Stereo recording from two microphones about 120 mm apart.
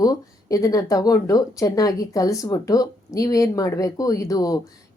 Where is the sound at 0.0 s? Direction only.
30° left (ahead or behind).